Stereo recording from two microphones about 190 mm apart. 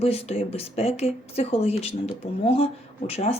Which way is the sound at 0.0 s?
30° left (ahead or behind).